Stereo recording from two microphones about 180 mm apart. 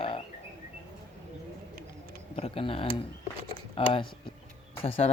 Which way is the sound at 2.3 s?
30° left (ahead or behind).